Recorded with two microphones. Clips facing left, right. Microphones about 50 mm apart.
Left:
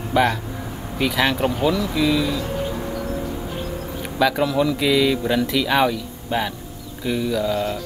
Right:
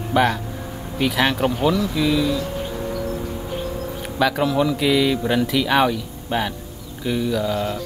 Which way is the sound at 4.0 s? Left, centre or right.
Centre.